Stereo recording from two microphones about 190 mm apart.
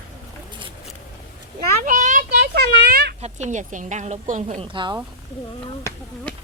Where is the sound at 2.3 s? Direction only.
55° right (ahead or behind).